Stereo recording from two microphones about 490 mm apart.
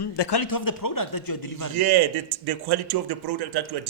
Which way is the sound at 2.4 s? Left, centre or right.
Right.